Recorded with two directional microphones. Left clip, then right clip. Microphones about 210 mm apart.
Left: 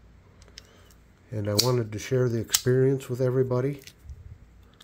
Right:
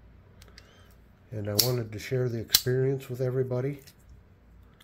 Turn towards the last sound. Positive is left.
turn(degrees=30)  # may be behind; listen again after turning